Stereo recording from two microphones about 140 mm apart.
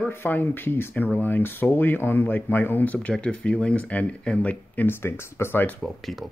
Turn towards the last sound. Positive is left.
turn(degrees=0)  # may be behind; listen again after turning